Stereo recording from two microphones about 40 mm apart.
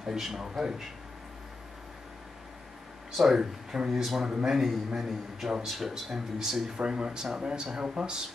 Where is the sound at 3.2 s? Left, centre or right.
Centre.